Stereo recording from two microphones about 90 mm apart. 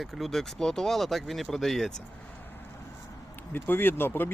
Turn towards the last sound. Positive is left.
turn(degrees=25)  # may be behind; listen again after turning